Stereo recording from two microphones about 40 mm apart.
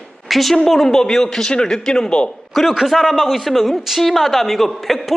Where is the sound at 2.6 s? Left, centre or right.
Centre.